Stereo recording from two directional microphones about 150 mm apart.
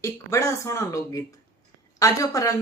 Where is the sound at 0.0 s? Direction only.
20° left (ahead or behind).